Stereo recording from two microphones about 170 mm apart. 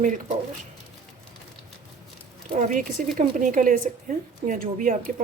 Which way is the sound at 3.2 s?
50° right (ahead or behind).